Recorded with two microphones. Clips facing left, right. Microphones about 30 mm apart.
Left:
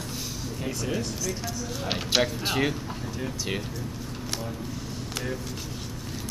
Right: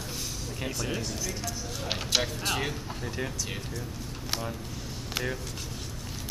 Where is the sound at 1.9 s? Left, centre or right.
Centre.